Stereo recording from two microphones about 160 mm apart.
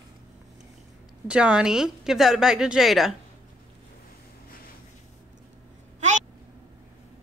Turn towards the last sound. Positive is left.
turn(degrees=-50)  # may be behind; listen again after turning